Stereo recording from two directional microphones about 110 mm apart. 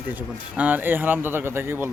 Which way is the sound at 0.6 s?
15° right (ahead or behind).